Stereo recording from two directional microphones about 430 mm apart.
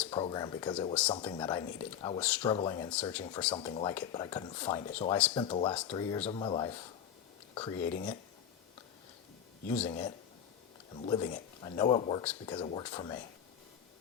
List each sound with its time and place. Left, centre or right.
0.0 s speech: centre
7.9 s speech: centre
9.6 s speech: centre